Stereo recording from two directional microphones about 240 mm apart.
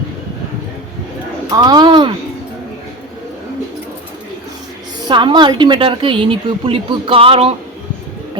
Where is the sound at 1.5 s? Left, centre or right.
Centre.